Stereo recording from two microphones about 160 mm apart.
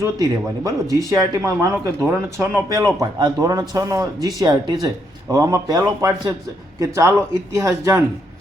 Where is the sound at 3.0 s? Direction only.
25° right (ahead or behind).